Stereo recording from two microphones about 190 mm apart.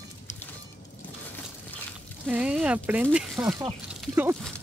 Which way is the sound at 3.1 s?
5° right (ahead or behind).